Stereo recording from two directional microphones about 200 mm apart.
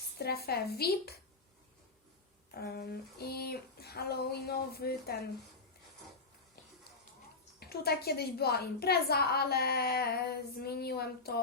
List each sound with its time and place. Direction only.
0.2 s a woman's voice: 50° left (ahead or behind)
2.6 s a woman's voice: 50° left (ahead or behind)
7.6 s a woman's voice: 50° left (ahead or behind)